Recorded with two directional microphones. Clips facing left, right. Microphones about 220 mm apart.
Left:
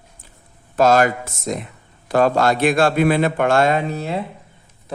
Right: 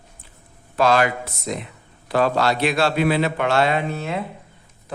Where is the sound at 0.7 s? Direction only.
45° left (ahead or behind).